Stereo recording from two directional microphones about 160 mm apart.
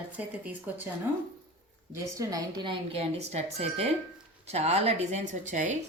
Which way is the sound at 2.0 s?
20° right (ahead or behind).